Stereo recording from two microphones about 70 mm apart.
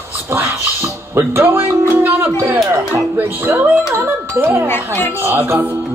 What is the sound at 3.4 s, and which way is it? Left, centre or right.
Music, right.